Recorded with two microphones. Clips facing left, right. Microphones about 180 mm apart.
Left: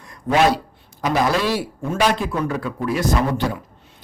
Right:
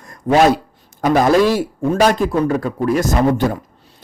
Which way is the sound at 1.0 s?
50° right (ahead or behind).